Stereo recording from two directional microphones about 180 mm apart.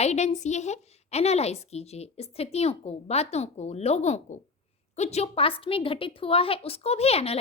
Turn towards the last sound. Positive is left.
turn(degrees=35)  # may be behind; listen again after turning